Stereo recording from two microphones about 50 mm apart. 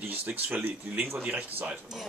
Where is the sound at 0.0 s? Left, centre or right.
Right.